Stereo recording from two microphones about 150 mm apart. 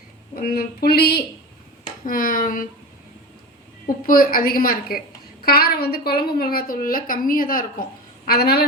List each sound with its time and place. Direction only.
0.3 s speech: 85° left
1.8 s speech: 70° left (ahead or behind)
3.8 s a woman's voice: 70° left (ahead or behind); by 8.6 s 90° left